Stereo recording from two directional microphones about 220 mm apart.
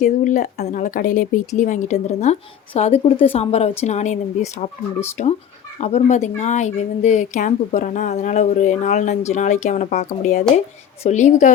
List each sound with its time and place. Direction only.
0.0 s speech: 35° left (ahead or behind)
5.2 s speech: 35° left (ahead or behind)